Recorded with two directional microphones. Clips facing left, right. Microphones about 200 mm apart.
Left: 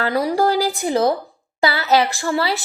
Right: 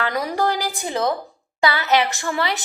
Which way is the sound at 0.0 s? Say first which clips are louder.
Left 4 dB; 30° left (ahead or behind).